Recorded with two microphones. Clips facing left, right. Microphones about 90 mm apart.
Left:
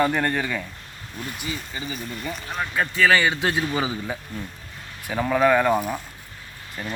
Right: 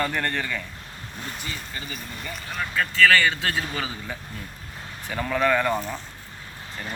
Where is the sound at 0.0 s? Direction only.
15° left (ahead or behind).